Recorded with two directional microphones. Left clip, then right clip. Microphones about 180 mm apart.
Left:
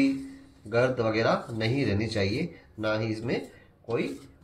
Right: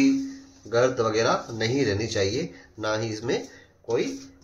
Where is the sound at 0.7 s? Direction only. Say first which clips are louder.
Right 3 dB; 35° right (ahead or behind).